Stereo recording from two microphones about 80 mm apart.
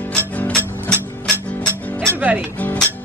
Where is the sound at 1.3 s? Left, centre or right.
Right.